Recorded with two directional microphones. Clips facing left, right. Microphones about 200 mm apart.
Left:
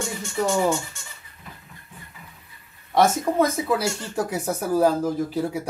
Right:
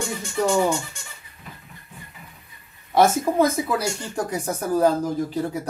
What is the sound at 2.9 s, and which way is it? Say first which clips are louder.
Speech: right 1 dB; centre (ahead or behind).